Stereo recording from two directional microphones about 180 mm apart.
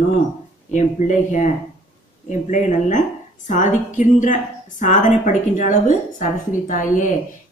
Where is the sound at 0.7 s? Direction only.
40° left (ahead or behind).